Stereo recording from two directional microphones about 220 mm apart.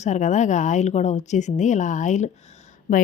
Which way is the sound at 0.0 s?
35° left (ahead or behind).